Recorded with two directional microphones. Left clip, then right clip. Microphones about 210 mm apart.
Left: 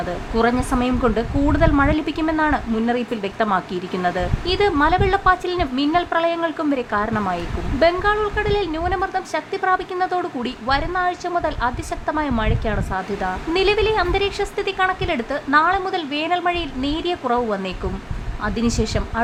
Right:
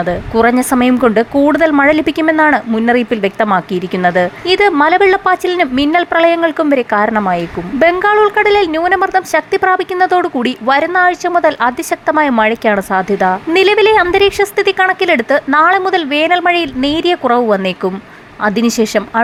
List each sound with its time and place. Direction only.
0.0 s a woman's voice: 25° right (ahead or behind)